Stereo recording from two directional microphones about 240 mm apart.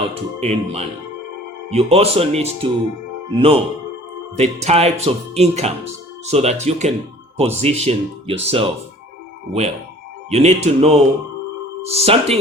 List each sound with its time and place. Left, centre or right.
0.0 s speech: right
10.2 s speech: right